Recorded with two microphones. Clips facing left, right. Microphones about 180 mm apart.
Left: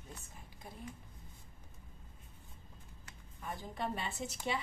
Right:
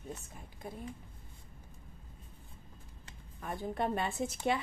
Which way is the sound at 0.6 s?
55° right (ahead or behind).